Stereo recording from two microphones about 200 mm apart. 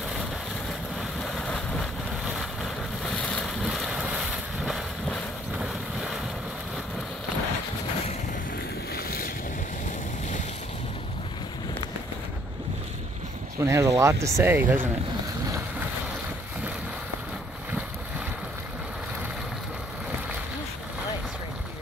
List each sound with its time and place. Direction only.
1.2 s vehicle: 5° left (ahead or behind)
8.9 s boat: 50° left (ahead or behind)
13.6 s speech: 15° right (ahead or behind)